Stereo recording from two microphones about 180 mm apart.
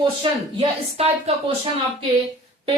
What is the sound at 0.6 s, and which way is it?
Speech, 35° right (ahead or behind).